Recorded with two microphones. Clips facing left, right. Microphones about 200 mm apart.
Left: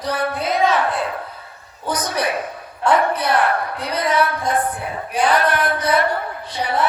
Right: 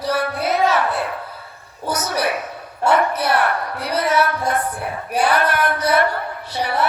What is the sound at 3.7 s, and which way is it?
Music, 10° right (ahead or behind).